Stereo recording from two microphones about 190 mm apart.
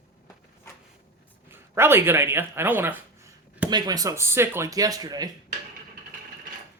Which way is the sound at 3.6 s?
20° right (ahead or behind).